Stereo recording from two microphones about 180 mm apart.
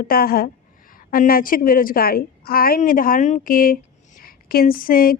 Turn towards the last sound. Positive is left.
turn(degrees=55)  # may be behind; listen again after turning